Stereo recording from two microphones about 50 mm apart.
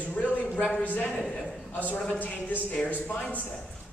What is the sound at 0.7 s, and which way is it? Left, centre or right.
A man's voice, left.